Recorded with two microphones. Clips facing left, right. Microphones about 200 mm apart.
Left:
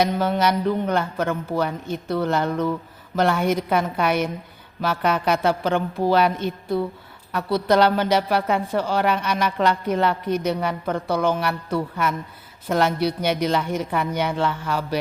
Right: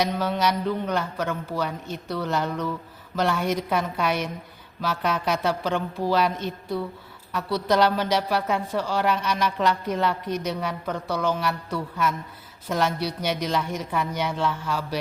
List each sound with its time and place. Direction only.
0.0 s a man's voice: 55° left (ahead or behind)